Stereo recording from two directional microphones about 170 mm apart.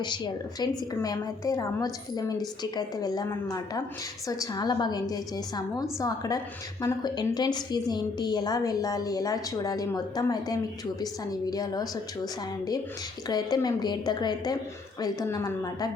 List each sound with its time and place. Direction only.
1.0 s a woman's voice: 20° left (ahead or behind)